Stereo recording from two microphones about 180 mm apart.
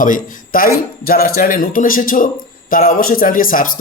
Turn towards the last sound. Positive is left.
turn(degrees=50)  # may be behind; listen again after turning